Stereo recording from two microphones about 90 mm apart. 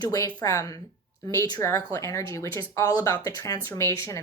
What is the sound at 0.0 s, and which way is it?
Speech, 40° left (ahead or behind).